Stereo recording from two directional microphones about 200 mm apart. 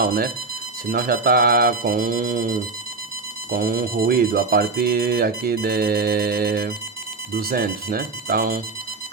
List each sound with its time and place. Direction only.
0.0 s speech: 45° right (ahead or behind)